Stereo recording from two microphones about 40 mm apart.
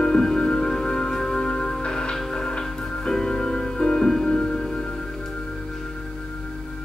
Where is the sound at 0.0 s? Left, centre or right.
Centre.